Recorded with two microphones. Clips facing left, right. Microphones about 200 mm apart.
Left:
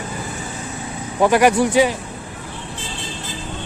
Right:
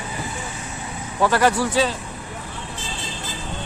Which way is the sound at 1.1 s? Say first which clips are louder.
Left 4 dB; 15° left (ahead or behind).